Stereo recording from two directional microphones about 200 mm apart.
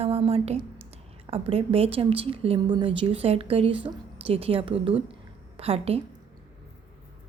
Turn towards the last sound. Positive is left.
turn(degrees=-30)  # may be behind; listen again after turning